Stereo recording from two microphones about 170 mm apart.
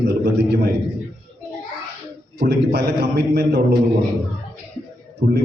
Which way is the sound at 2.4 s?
80° right.